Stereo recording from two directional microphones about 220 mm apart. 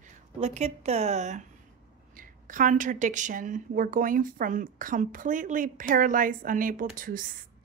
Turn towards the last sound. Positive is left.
turn(degrees=-40)  # may be behind; listen again after turning